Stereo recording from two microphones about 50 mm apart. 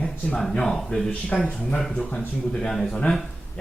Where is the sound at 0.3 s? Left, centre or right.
Centre.